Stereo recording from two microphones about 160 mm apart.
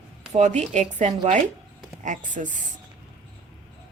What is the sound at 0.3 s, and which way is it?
Speech, 45° right (ahead or behind).